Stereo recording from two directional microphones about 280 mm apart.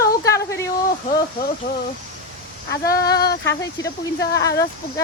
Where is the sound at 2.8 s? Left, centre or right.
Centre.